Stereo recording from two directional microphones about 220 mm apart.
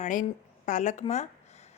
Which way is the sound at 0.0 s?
35° left (ahead or behind).